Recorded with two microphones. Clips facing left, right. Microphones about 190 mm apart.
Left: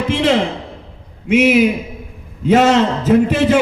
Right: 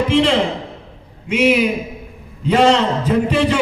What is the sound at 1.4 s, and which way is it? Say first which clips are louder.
A man's voice: left 2 dB; 45° left (ahead or behind).